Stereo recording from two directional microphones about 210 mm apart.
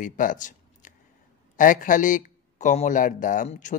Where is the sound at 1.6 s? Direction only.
40° left (ahead or behind).